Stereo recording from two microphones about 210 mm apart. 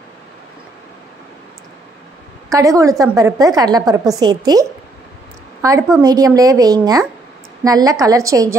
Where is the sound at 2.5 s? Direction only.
15° right (ahead or behind).